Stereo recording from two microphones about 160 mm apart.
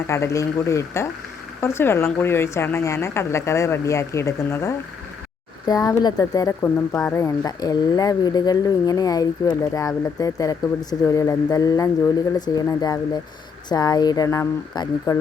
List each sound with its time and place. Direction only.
0.1 s a woman's voice: 20° left (ahead or behind)